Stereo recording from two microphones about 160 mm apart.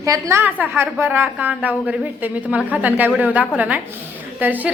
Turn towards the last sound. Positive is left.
turn(degrees=-10)  # may be behind; listen again after turning